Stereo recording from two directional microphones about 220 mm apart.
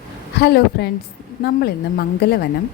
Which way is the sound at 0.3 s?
50° left (ahead or behind).